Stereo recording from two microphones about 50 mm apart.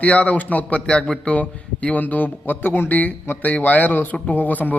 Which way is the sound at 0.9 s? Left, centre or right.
Centre.